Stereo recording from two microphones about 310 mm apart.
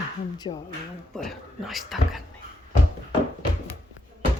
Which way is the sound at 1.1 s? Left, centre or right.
Centre.